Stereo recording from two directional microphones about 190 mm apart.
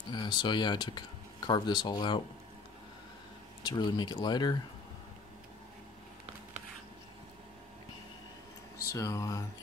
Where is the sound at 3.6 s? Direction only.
25° left (ahead or behind).